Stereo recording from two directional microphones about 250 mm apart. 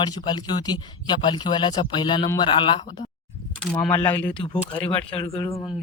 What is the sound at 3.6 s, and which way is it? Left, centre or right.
Speech, centre.